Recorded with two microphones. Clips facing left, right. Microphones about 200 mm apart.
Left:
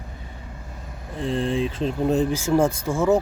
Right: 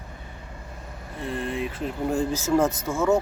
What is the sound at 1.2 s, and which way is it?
Speech, 30° left (ahead or behind).